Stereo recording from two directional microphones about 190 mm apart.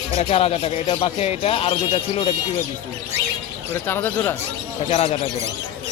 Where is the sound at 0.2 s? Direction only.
30° left (ahead or behind).